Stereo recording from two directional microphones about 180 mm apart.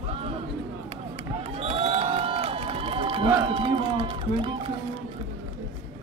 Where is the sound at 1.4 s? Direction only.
35° right (ahead or behind).